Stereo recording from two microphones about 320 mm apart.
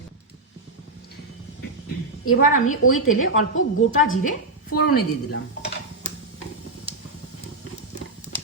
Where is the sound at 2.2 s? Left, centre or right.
Left.